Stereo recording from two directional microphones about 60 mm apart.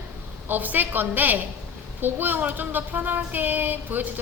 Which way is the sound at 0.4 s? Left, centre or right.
Right.